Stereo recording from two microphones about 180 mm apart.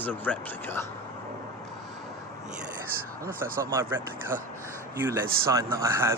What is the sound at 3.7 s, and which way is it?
Speech, 15° right (ahead or behind).